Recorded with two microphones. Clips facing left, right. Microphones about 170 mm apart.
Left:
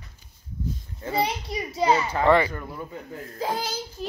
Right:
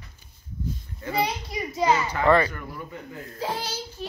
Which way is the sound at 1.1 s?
25° left (ahead or behind).